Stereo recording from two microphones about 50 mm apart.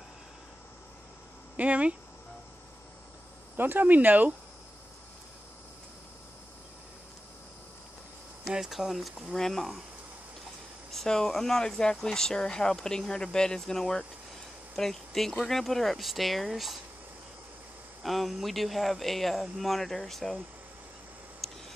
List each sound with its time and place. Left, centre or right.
1.6 s speech: right
3.5 s speech: right
8.5 s speech: centre
9.3 s speech: centre
10.9 s speech: centre
18.0 s speech: centre
21.4 s a sound: centre